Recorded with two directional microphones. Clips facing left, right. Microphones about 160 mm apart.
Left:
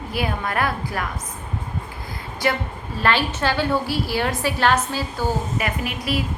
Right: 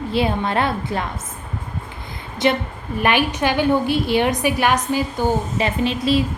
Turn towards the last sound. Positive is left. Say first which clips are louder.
# right 7 dB
turn(degrees=-25)  # may be behind; listen again after turning